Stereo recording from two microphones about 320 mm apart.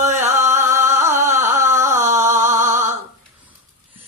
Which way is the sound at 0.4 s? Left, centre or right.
Right.